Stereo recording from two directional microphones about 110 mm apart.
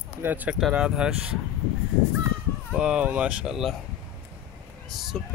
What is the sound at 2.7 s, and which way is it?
Speech, 10° right (ahead or behind).